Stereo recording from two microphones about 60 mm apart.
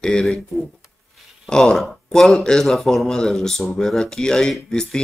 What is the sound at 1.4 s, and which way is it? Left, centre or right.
Speech, centre.